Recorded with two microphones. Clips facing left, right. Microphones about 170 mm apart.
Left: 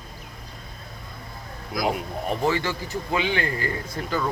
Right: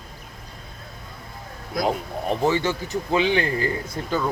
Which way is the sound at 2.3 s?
20° right (ahead or behind).